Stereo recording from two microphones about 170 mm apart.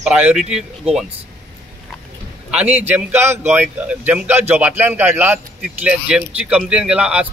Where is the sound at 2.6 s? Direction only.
40° right (ahead or behind).